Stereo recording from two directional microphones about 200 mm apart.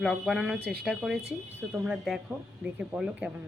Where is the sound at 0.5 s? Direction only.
55° right (ahead or behind).